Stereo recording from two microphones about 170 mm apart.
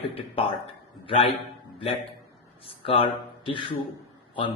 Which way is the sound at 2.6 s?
35° left (ahead or behind).